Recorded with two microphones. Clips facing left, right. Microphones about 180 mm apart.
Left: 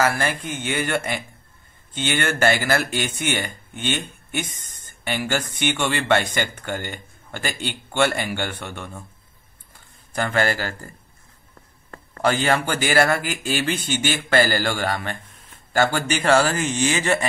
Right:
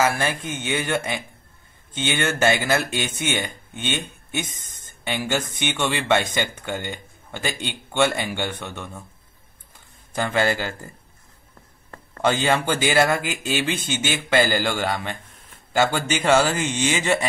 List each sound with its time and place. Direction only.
0.0 s speech: 20° right (ahead or behind)
5.0 s speech: 15° right (ahead or behind)
8.5 s speech: 10° left (ahead or behind)
10.1 s speech: 15° right (ahead or behind)
11.9 s speech: 20° right (ahead or behind)